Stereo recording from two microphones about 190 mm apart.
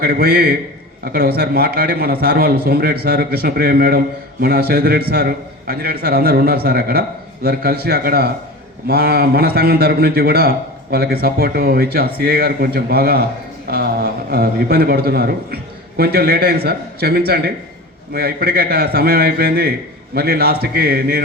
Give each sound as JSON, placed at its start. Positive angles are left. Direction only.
{"t": 0.0, "sound": "a man's voice", "side_deg": -55}